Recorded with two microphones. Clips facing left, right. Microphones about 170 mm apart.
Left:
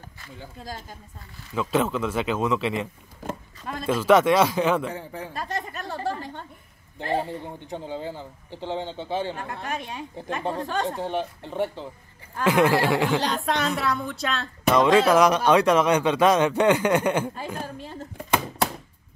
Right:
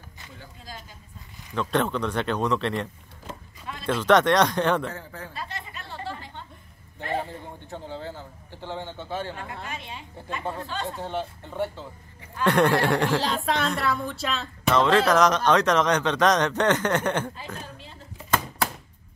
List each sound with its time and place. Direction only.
1.5 s a woman's voice: 5° left (ahead or behind)
3.3 s a sound: 45° left (ahead or behind)
3.8 s a woman's voice: 5° left (ahead or behind)
4.9 s speech: 15° left (ahead or behind)
5.3 s a sound: 45° left (ahead or behind)
7.0 s a man's voice: 30° left (ahead or behind)
7.4 s a man's voice: 15° left (ahead or behind)
9.5 s speech: 45° left (ahead or behind)
10.4 s a man's voice: 20° left (ahead or behind)
10.7 s speech: 45° left (ahead or behind)
11.0 s speech: 15° left (ahead or behind)
12.4 s a woman's voice: centre (ahead or behind)
14.7 s speech: 10° left (ahead or behind)
17.6 s speech: 45° left (ahead or behind)